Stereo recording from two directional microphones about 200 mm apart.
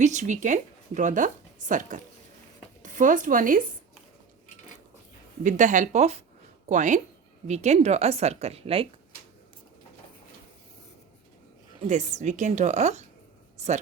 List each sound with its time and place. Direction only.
0.0 s speech: 35° right (ahead or behind)
5.4 s speech: 40° right (ahead or behind)
11.8 s speech: 35° right (ahead or behind)